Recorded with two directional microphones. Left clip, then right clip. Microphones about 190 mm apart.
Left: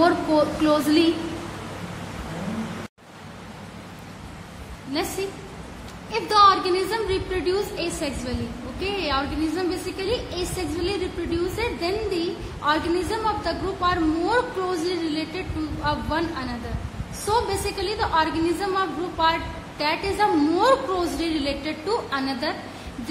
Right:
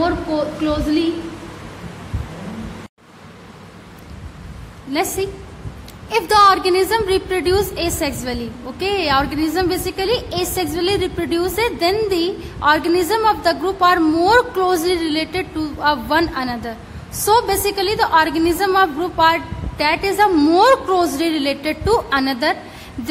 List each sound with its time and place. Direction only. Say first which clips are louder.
0.0 s a woman's voice: even; 10° right (ahead or behind)
6.0 s a woman's voice: right 5 dB; 40° right (ahead or behind)